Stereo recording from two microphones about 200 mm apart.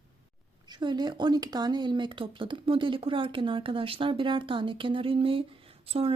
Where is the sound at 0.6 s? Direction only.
20° right (ahead or behind).